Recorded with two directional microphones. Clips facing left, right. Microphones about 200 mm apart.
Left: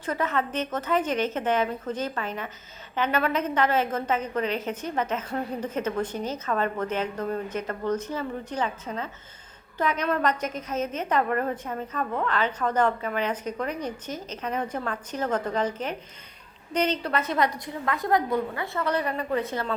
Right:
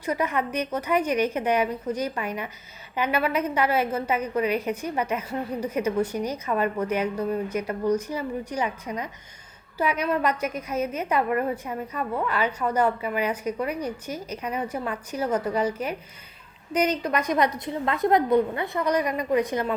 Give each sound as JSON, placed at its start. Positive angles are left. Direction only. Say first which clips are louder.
{"t": 0.0, "sound": "a woman's voice", "louder": "right 1 dB", "side_deg": -10}